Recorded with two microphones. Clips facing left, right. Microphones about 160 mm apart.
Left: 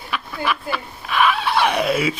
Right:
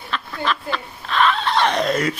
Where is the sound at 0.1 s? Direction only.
10° left (ahead or behind).